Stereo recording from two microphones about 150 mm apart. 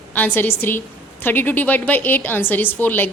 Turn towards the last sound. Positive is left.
turn(degrees=15)  # may be behind; listen again after turning